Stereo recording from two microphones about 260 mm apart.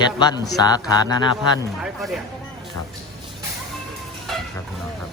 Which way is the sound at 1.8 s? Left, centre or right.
Centre.